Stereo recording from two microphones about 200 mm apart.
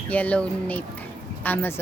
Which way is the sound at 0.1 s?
5° left (ahead or behind).